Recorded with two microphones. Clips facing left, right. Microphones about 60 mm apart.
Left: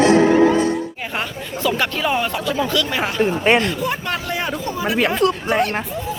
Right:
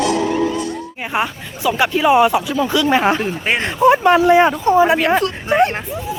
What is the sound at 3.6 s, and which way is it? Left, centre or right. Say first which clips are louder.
Speech: right 10 dB; right.